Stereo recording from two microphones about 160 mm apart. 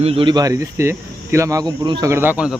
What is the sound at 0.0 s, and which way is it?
A man's voice, 35° right (ahead or behind).